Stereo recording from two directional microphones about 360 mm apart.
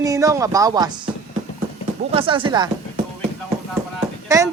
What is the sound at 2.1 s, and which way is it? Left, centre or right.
Speech, centre.